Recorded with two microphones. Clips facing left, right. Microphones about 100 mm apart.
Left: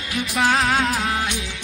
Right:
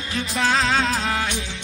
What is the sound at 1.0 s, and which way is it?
Music, 15° left (ahead or behind).